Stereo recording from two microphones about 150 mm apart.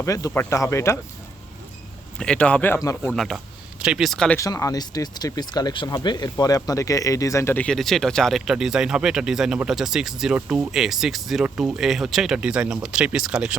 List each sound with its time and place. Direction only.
0.0 s speech: 20° left (ahead or behind)
2.1 s speech: 5° left (ahead or behind)
3.2 s speech: centre (ahead or behind)
4.4 s speech: 20° left (ahead or behind); by 13.6 s 5° right (ahead or behind)